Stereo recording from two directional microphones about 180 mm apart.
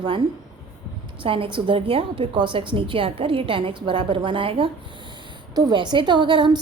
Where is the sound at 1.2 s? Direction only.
30° right (ahead or behind).